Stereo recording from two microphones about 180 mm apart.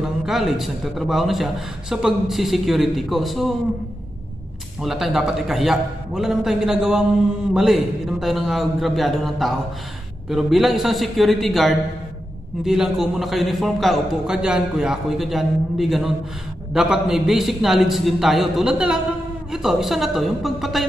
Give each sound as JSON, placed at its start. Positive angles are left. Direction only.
{"t": 0.2, "sound": "a man's voice", "side_deg": 0}
{"t": 4.8, "sound": "a man's voice", "side_deg": 0}